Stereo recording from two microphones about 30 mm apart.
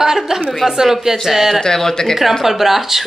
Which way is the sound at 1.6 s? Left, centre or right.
Centre.